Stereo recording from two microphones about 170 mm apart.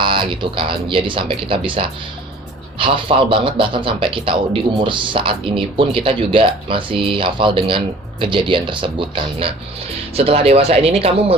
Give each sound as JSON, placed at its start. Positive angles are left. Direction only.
{"t": 0.0, "sound": "speech", "side_deg": -30}